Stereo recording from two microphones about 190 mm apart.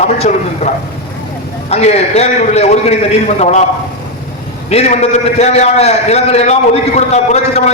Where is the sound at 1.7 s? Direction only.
35° left (ahead or behind).